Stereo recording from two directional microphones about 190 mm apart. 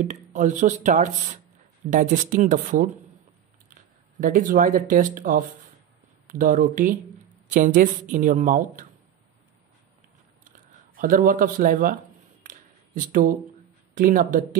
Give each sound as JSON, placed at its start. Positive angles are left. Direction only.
{"t": 0.0, "sound": "a woman's voice", "side_deg": -40}
{"t": 4.2, "sound": "a woman's voice", "side_deg": -45}
{"t": 11.0, "sound": "a woman's voice", "side_deg": -45}
{"t": 12.4, "sound": "a sound", "side_deg": -45}
{"t": 13.9, "sound": "a woman's voice", "side_deg": -45}